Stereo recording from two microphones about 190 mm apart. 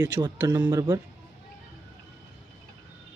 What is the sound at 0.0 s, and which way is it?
Speech, 15° right (ahead or behind).